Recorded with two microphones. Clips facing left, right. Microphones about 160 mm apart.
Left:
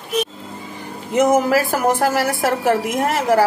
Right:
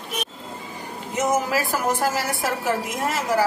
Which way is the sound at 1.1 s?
60° left (ahead or behind).